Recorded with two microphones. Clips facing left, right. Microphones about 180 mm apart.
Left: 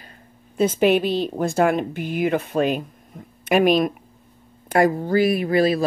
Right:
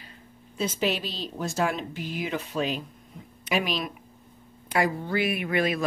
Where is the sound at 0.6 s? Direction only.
55° left (ahead or behind).